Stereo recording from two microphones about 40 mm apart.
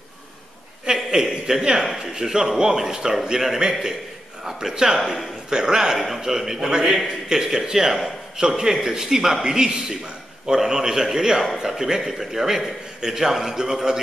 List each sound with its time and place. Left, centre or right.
0.8 s a man's voice: centre